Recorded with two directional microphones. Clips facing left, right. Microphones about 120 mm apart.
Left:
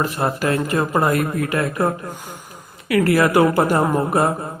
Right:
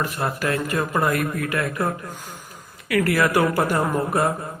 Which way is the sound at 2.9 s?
25° left (ahead or behind).